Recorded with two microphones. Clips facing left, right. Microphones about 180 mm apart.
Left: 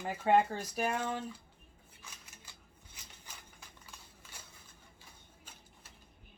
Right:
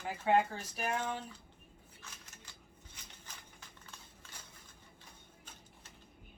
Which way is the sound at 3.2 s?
10° left (ahead or behind).